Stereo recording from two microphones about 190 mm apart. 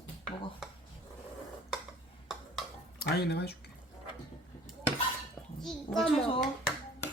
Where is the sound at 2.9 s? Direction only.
60° left (ahead or behind).